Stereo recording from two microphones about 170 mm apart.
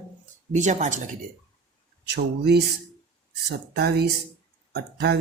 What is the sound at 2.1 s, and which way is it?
Speech, 70° right (ahead or behind).